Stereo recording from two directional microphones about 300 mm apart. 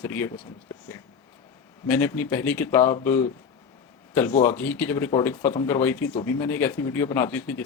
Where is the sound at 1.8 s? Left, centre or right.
Centre.